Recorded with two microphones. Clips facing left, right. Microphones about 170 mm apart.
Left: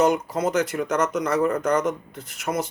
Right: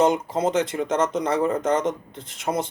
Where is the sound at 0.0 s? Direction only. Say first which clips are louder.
Even; 25° right (ahead or behind).